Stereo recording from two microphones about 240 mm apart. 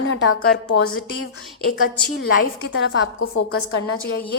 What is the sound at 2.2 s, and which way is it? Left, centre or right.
A woman's voice, left.